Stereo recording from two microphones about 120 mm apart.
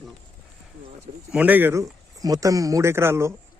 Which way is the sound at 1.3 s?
15° right (ahead or behind).